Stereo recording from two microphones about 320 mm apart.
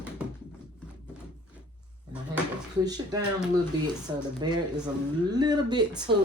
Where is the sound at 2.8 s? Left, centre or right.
Centre.